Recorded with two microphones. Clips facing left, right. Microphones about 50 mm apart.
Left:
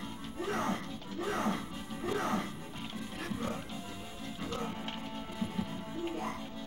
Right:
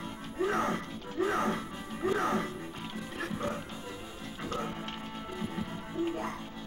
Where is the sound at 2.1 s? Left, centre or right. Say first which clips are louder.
Right 3 dB; right.